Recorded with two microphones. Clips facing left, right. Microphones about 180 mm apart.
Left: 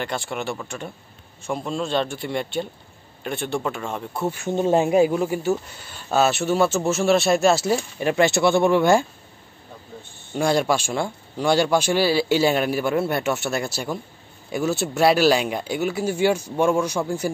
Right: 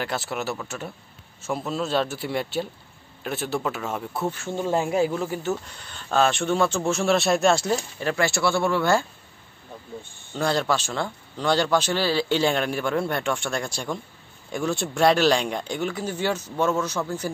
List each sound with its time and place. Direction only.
0.0 s a man's voice: 5° right (ahead or behind)
4.3 s speech: 15° left (ahead or behind)
10.3 s speech: 10° left (ahead or behind)